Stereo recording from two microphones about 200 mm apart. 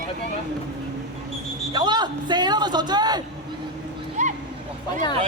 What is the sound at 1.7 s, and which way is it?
Speech, 20° right (ahead or behind).